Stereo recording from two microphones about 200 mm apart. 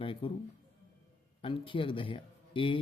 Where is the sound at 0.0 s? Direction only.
25° left (ahead or behind).